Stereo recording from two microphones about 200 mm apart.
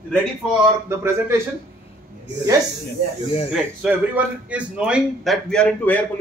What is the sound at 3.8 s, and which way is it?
A man's voice, 5° right (ahead or behind).